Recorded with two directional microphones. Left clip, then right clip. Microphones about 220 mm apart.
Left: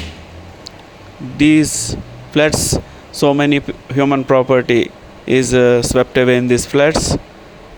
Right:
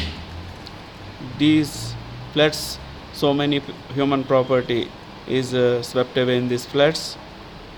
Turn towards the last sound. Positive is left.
turn(degrees=40)  # may be behind; listen again after turning